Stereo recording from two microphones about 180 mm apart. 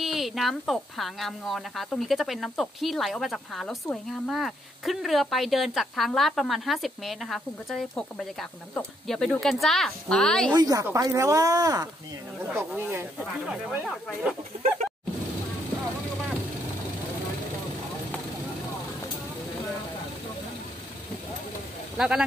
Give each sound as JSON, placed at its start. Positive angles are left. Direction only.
{"t": 0.0, "sound": "speech", "side_deg": 0}
{"t": 10.5, "sound": "speech", "side_deg": -20}
{"t": 21.9, "sound": "speech", "side_deg": -5}